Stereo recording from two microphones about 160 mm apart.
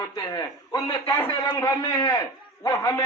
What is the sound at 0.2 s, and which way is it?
Speech, 25° left (ahead or behind).